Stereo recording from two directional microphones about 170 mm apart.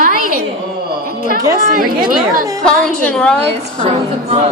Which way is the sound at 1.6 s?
60° right (ahead or behind).